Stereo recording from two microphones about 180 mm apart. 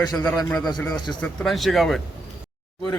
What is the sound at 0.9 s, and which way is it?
Speech, 25° left (ahead or behind).